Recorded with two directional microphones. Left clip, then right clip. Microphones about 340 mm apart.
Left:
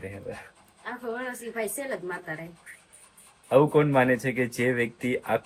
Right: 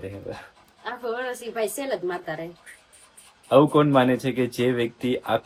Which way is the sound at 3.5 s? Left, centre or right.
Centre.